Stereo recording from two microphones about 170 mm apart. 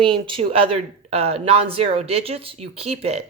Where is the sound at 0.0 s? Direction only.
30° right (ahead or behind).